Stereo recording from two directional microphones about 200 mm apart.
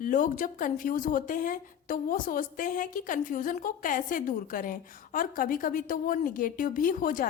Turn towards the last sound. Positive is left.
turn(degrees=45)  # may be behind; listen again after turning